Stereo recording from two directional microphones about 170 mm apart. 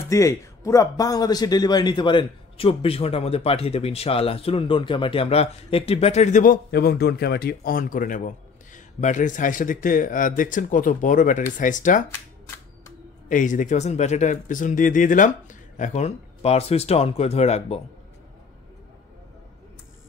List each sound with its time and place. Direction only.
0.1 s a man's voice: 20° left (ahead or behind); by 12.0 s 50° left (ahead or behind)
13.3 s a man's voice: 50° left (ahead or behind)